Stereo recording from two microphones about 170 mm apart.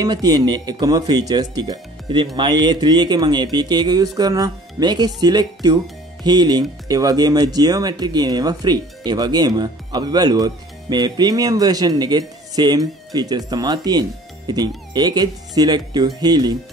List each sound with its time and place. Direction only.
0.0 s speech: 25° right (ahead or behind)